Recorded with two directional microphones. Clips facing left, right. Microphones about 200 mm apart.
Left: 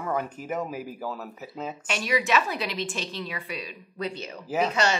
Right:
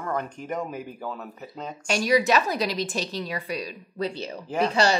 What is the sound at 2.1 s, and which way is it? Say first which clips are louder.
A woman's voice: right 4 dB; 40° right (ahead or behind).